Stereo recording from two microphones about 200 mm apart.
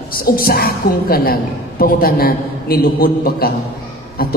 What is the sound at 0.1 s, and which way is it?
A man's voice, 50° left (ahead or behind).